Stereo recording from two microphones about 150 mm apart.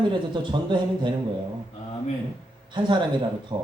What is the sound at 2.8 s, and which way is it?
Speech, 35° right (ahead or behind).